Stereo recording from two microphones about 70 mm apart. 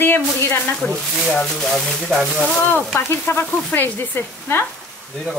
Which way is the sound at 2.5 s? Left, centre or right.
Left.